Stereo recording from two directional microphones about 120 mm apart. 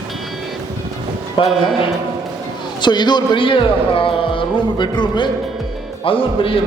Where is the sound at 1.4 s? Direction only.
45° left (ahead or behind).